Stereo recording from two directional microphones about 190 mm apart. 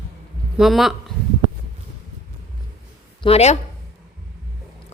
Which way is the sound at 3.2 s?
35° left (ahead or behind).